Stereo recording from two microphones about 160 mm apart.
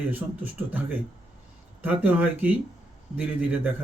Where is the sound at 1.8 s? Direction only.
10° right (ahead or behind).